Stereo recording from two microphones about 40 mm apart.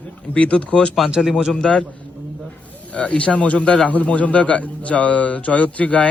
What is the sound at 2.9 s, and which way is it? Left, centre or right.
A man's voice, left.